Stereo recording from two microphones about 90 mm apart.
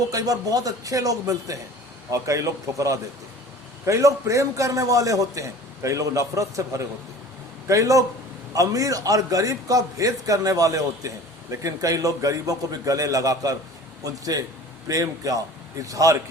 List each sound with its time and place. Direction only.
0.1 s a man's voice: 40° right (ahead or behind)